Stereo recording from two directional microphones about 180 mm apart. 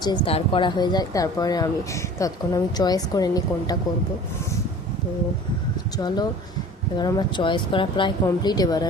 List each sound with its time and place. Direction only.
0.0 s speech: 30° left (ahead or behind)
6.0 s speech: 20° left (ahead or behind)